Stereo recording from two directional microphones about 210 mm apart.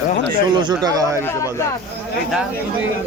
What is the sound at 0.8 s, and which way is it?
Speech, 15° right (ahead or behind).